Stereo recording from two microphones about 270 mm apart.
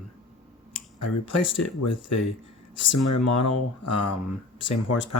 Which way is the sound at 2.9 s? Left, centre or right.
Left.